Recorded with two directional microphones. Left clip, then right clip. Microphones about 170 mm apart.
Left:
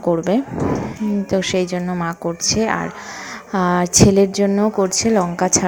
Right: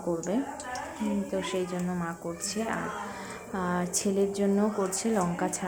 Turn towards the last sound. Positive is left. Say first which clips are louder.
# left 12 dB
turn(degrees=35)  # may be behind; listen again after turning